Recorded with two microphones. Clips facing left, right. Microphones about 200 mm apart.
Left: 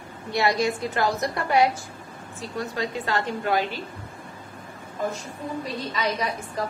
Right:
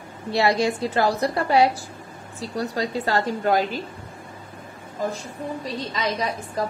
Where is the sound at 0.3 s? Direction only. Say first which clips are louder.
Right 2 dB; 30° right (ahead or behind).